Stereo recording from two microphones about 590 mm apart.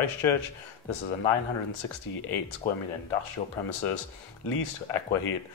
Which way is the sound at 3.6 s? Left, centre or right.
Left.